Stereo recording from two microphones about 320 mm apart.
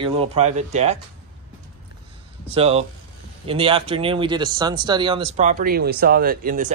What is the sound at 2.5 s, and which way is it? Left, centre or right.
Speech, centre.